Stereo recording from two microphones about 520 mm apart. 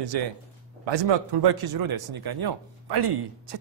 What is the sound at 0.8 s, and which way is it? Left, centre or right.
A man's voice, right.